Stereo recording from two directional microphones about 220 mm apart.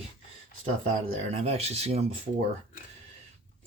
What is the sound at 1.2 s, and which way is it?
Speech, 30° right (ahead or behind).